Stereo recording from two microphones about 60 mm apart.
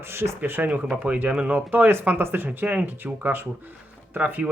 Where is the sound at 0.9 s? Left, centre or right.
Right.